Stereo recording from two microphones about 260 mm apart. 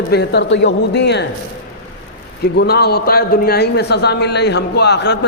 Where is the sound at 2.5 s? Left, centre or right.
Left.